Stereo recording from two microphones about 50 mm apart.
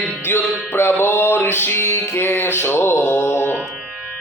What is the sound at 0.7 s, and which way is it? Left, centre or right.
Music, left.